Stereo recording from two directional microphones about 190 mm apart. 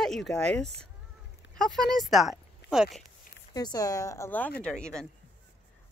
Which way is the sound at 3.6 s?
20° left (ahead or behind).